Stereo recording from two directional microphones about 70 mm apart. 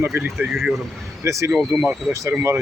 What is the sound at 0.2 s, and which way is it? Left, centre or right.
Speech, centre.